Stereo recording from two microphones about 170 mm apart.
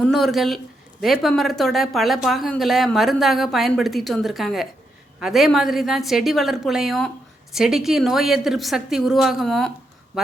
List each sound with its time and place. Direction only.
0.0 s speech: centre (ahead or behind)